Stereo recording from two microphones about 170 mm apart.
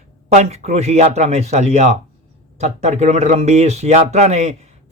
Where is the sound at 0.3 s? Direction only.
40° right (ahead or behind).